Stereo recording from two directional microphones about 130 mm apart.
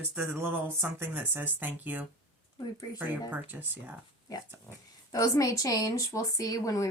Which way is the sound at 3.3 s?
15° right (ahead or behind).